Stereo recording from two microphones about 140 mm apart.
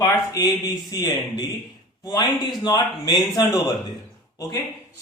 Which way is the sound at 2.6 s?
30° left (ahead or behind).